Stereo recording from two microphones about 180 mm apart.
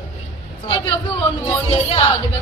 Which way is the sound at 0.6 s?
25° left (ahead or behind).